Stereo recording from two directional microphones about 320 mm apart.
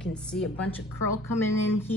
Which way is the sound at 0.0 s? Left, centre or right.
Centre.